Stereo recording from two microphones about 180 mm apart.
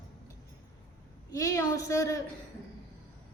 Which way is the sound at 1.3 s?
20° left (ahead or behind).